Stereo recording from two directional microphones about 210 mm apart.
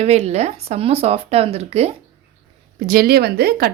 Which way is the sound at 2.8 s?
40° right (ahead or behind).